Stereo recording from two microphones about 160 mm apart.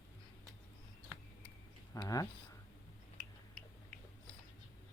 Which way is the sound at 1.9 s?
20° left (ahead or behind).